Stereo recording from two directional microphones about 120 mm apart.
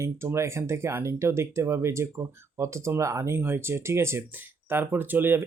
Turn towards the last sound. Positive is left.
turn(degrees=-20)  # may be behind; listen again after turning